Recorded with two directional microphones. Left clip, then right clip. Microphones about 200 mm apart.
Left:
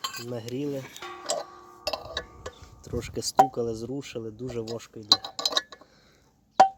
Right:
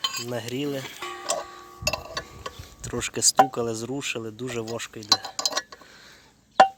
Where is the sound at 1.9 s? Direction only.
55° left (ahead or behind).